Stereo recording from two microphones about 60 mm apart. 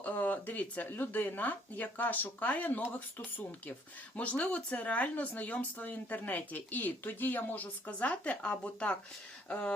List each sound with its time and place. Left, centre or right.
0.0 s speech: left
4.2 s speech: left